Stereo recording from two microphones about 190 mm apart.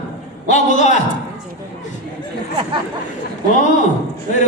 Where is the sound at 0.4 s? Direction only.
40° left (ahead or behind).